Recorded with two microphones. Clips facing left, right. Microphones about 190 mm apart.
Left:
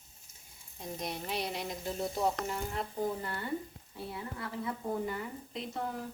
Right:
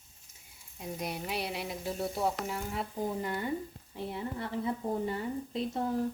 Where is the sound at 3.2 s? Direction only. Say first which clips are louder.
Right 5 dB; 15° right (ahead or behind).